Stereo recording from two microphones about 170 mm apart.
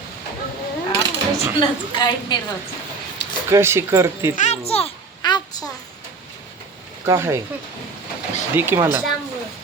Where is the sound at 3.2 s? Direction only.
80° left.